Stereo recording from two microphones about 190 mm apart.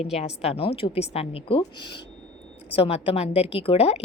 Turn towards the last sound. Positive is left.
turn(degrees=35)  # may be behind; listen again after turning